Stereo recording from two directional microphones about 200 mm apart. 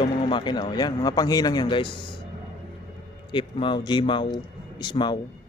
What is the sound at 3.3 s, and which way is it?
A man's voice, 25° left (ahead or behind).